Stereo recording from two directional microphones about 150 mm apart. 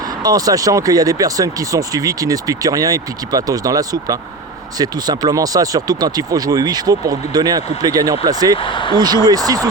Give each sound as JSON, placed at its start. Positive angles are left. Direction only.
{"t": 0.2, "sound": "speech", "side_deg": -25}
{"t": 8.5, "sound": "speech", "side_deg": 35}
{"t": 9.0, "sound": "speech", "side_deg": -25}